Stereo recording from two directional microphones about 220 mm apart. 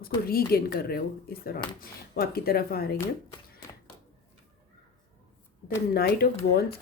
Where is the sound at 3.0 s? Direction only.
15° left (ahead or behind).